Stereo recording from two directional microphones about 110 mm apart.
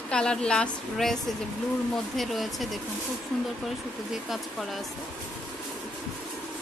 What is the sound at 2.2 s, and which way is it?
Speech, centre (ahead or behind).